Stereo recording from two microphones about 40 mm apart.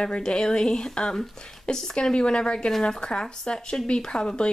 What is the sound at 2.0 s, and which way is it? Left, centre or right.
Speech, left.